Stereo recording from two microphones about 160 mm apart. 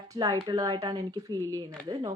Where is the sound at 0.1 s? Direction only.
25° right (ahead or behind).